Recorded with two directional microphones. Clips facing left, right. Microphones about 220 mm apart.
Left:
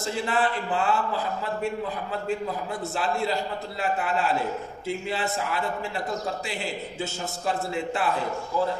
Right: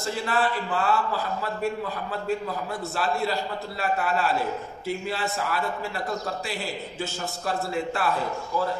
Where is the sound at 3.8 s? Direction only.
20° left (ahead or behind).